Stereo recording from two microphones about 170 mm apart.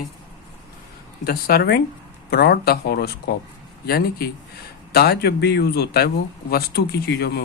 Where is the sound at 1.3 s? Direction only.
65° left (ahead or behind).